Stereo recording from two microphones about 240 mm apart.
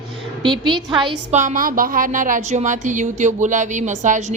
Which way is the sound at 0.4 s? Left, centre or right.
Centre.